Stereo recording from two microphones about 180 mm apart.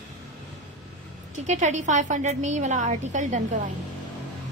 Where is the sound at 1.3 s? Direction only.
40° right (ahead or behind).